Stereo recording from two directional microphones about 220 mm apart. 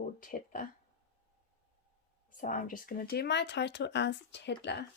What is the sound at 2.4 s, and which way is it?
A woman's voice, 35° left (ahead or behind).